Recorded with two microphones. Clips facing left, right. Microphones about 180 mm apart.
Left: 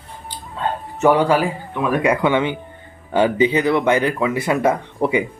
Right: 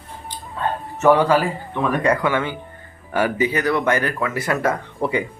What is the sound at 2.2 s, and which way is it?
Speech, 20° left (ahead or behind).